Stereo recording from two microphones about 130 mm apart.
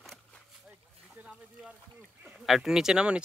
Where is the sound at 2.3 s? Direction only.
5° right (ahead or behind).